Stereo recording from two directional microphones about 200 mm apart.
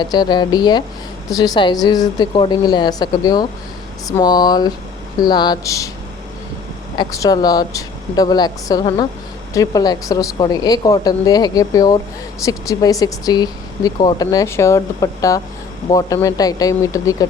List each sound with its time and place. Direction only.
0.0 s speech: 20° left (ahead or behind)
6.9 s speech: 20° left (ahead or behind)